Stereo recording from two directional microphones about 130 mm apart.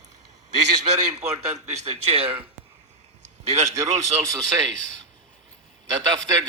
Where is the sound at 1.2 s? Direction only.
55° right (ahead or behind).